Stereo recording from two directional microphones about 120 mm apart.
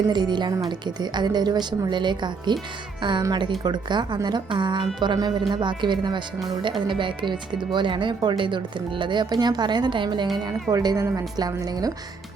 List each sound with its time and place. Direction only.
0.1 s speech: 40° right (ahead or behind)